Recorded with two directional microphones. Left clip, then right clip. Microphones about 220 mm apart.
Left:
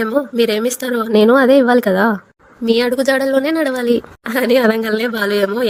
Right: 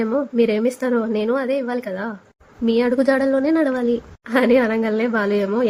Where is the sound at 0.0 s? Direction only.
45° left (ahead or behind).